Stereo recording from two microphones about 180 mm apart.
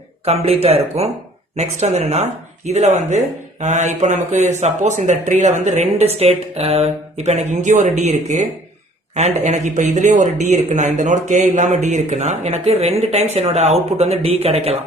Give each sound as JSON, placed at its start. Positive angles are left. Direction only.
{"t": 0.3, "sound": "speech", "side_deg": -35}